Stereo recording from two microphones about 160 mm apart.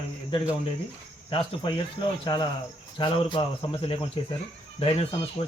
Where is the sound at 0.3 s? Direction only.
30° left (ahead or behind).